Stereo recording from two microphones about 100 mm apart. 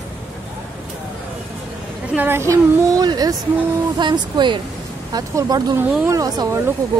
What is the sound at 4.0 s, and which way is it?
Speech, 50° right (ahead or behind).